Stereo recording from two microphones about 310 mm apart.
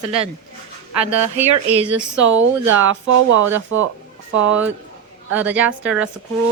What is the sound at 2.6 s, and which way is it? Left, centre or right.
Speech, right.